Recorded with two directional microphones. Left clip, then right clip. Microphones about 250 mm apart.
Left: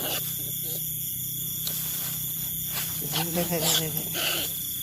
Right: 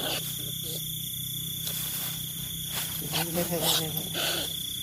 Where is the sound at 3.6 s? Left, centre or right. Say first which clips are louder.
Left 1 dB; centre.